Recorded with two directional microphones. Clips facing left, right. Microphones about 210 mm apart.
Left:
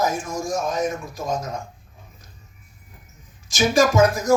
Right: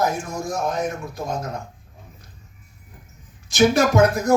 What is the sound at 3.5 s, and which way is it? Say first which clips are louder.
Speech: right 2 dB; 60° right (ahead or behind).